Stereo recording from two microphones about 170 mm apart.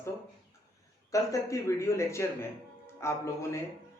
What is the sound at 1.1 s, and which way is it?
Speech, 20° left (ahead or behind).